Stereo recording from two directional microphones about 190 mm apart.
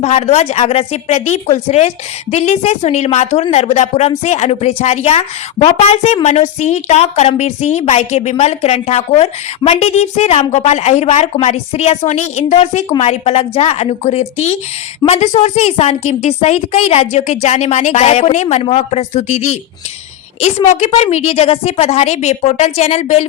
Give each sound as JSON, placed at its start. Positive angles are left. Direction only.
{"t": 0.0, "sound": "a woman's voice", "side_deg": 35}
{"t": 20.7, "sound": "a woman's voice", "side_deg": 35}